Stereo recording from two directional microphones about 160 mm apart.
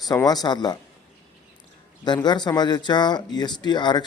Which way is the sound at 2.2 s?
25° left (ahead or behind).